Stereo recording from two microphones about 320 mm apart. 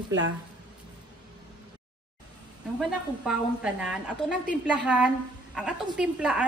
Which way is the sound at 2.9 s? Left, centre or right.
Centre.